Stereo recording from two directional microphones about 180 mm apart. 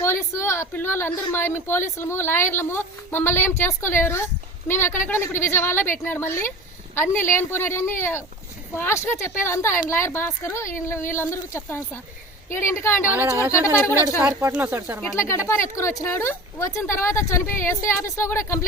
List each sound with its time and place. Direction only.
0.0 s a woman's voice: 15° left (ahead or behind)
13.1 s speech: 15° right (ahead or behind)
15.1 s a woman's voice: 15° left (ahead or behind)